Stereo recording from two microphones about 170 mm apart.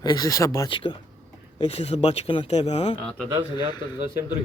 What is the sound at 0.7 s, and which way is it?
Speech, 30° left (ahead or behind).